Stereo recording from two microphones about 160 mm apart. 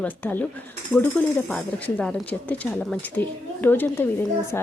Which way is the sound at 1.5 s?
5° left (ahead or behind).